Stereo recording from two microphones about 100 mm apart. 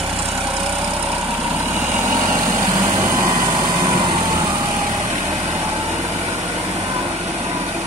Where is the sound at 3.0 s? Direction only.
30° right (ahead or behind).